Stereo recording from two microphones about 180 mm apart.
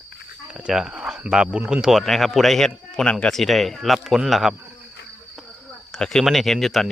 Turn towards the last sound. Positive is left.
turn(degrees=0)  # may be behind; listen again after turning